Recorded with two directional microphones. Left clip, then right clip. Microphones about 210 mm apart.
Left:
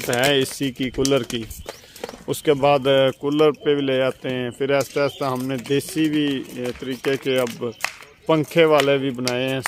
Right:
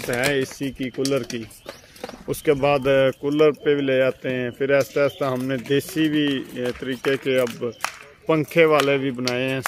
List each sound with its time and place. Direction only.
0.1 s speech: 25° left (ahead or behind)